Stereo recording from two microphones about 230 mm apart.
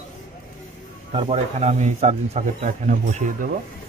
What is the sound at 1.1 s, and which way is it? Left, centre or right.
Speech, right.